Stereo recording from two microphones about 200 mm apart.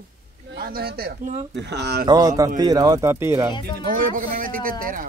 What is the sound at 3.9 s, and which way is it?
Speech, 45° right (ahead or behind).